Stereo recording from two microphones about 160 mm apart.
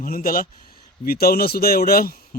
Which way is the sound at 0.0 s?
60° left (ahead or behind).